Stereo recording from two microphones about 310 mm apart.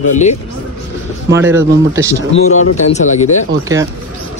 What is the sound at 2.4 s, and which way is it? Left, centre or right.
Speech, left.